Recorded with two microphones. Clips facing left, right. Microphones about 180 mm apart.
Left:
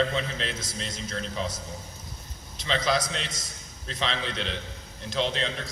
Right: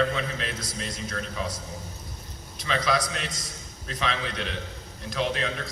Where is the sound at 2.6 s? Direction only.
25° left (ahead or behind).